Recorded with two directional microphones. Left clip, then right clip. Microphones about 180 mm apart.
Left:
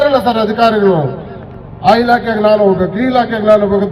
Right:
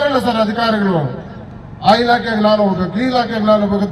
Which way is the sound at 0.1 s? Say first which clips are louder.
Left 3 dB; 60° left (ahead or behind).